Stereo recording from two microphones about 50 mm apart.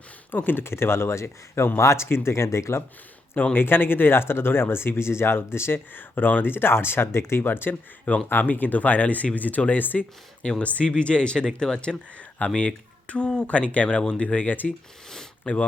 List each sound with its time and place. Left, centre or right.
0.3 s speech: left
3.5 s speech: left
10.6 s speech: left